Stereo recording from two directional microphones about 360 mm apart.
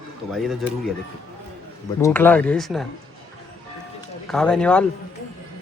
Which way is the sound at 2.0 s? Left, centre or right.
Centre.